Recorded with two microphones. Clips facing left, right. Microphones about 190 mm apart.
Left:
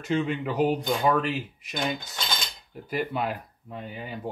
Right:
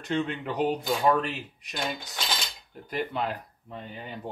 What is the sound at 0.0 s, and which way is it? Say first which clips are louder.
Speech: left 3 dB; 5° left (ahead or behind).